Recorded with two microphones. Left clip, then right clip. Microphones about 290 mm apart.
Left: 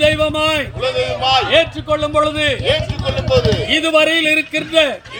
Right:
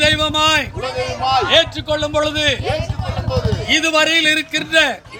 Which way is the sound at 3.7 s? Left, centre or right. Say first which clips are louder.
Even; centre.